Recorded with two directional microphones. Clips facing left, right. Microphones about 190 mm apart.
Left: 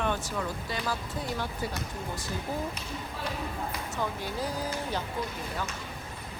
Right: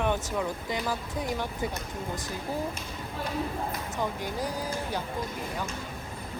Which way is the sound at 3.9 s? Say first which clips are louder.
Right 1 dB; 15° right (ahead or behind).